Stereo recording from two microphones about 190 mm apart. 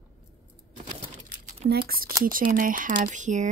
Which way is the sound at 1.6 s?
55° right (ahead or behind).